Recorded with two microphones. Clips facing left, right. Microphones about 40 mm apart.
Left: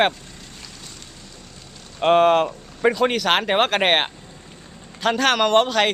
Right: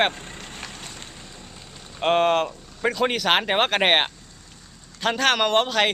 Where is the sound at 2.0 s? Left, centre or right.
Centre.